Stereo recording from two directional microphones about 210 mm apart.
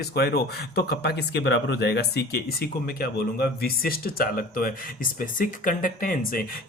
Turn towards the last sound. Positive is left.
turn(degrees=40)  # may be behind; listen again after turning